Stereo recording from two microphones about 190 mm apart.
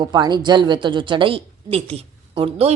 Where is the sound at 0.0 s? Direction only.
20° right (ahead or behind).